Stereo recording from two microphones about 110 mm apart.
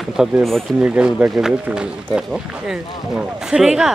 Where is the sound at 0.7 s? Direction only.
10° right (ahead or behind).